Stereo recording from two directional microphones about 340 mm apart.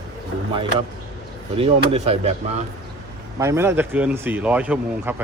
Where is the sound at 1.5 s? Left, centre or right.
Centre.